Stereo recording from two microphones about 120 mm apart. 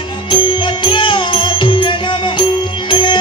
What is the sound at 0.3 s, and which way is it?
Music, 45° left (ahead or behind).